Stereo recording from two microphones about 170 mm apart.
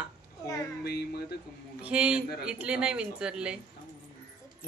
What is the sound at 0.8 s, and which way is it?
Speech, 70° left (ahead or behind).